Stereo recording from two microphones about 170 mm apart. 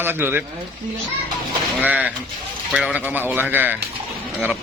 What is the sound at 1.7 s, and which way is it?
Speech, 10° right (ahead or behind).